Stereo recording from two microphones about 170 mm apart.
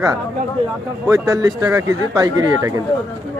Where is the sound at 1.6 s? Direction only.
20° right (ahead or behind).